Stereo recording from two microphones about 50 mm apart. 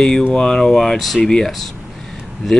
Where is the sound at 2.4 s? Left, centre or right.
Centre.